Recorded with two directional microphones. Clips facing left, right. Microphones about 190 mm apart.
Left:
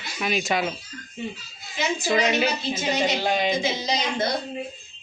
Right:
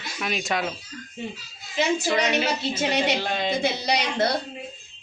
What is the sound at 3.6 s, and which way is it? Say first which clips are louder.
Speech: right 1 dB; 70° right (ahead or behind).